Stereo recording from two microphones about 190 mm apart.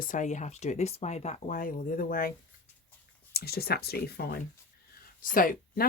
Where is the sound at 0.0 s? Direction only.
45° left (ahead or behind).